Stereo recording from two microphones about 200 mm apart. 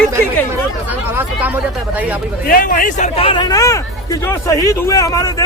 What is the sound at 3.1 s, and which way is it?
Speech, 25° left (ahead or behind).